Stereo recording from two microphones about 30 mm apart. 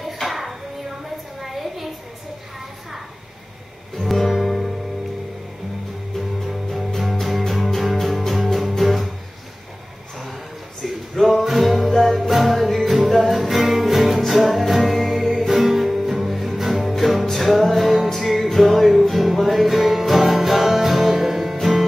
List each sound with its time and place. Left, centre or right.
0.0 s music: centre
1.4 s a sound: centre
4.3 s music: centre
7.0 s music: centre
11.2 s music: centre